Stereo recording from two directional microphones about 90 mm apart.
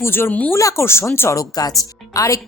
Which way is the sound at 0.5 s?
35° left (ahead or behind).